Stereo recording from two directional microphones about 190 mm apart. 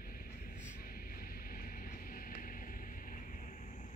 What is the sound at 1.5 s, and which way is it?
Vehicle, 50° left (ahead or behind).